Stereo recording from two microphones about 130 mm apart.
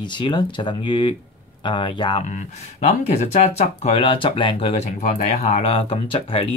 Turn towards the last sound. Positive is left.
turn(degrees=45)  # may be behind; listen again after turning